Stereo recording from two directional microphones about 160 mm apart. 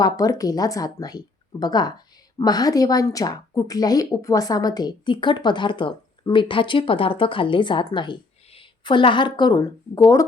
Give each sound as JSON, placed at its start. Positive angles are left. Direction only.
{"t": 0.0, "sound": "a woman's voice", "side_deg": 20}